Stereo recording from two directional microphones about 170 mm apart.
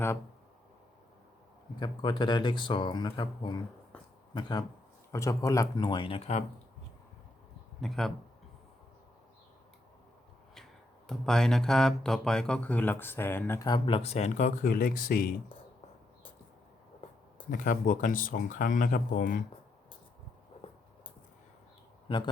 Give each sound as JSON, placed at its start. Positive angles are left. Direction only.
{"t": 1.8, "sound": "speech", "side_deg": 25}
{"t": 7.8, "sound": "speech", "side_deg": 0}
{"t": 10.5, "sound": "speech", "side_deg": 0}
{"t": 13.7, "sound": "speech", "side_deg": 30}
{"t": 17.5, "sound": "speech", "side_deg": 55}
{"t": 22.1, "sound": "speech", "side_deg": 30}